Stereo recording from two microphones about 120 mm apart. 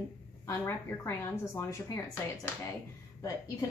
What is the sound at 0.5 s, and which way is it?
A woman's voice, 20° left (ahead or behind).